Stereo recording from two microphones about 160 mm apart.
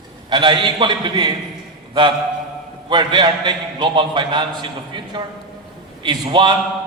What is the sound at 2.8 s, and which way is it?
A man's voice, 30° right (ahead or behind).